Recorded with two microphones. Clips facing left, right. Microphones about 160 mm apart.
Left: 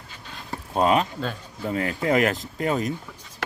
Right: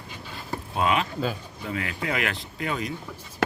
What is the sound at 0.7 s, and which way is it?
Speech, 40° left (ahead or behind).